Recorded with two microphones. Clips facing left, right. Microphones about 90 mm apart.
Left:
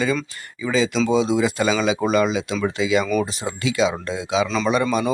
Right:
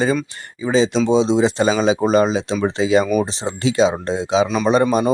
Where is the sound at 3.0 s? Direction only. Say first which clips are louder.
Right 3 dB; 10° right (ahead or behind).